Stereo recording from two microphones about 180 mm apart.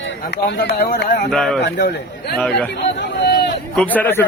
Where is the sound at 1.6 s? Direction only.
70° left (ahead or behind).